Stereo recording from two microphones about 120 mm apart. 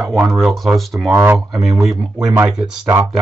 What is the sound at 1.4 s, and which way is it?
Speech, centre (ahead or behind).